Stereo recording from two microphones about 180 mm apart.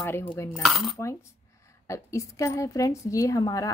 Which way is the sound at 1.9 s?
15° left (ahead or behind).